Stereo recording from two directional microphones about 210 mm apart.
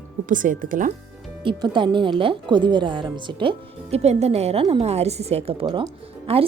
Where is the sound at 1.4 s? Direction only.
25° right (ahead or behind).